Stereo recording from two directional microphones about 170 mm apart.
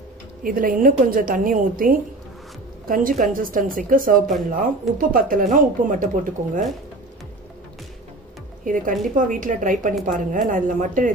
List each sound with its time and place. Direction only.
0.4 s a woman's voice: 55° right (ahead or behind)
8.6 s a woman's voice: 50° right (ahead or behind)